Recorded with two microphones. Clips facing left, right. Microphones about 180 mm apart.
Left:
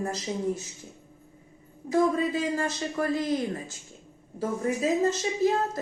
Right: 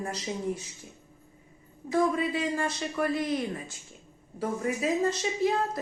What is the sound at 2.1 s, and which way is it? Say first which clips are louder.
A woman's voice: left 2 dB; 30° left (ahead or behind).